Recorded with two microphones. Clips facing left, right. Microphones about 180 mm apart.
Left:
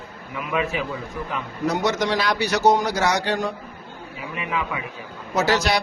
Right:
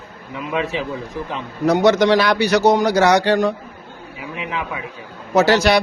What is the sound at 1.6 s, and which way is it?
A man's voice, 70° right (ahead or behind).